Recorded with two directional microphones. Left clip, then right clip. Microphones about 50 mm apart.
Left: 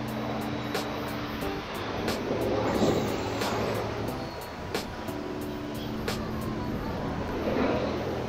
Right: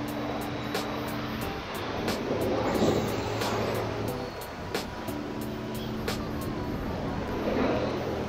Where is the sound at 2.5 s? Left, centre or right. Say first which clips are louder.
Even; centre.